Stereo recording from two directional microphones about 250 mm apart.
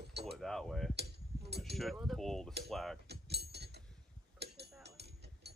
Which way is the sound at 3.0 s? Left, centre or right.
Right.